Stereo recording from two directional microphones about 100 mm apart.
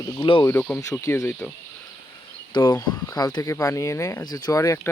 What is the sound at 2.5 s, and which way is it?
Speech, 45° left (ahead or behind).